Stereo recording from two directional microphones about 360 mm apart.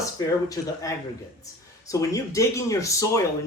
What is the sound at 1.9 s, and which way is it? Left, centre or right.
A man's voice, centre.